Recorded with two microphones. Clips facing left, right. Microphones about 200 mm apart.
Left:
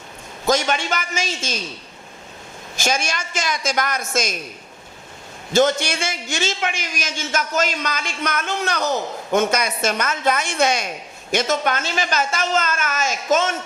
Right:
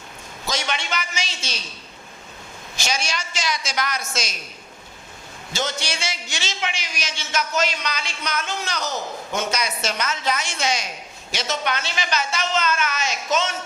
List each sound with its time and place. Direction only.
0.4 s a man's voice: 45° left (ahead or behind)
2.7 s a man's voice: 50° left (ahead or behind)
5.5 s a man's voice: 50° left (ahead or behind)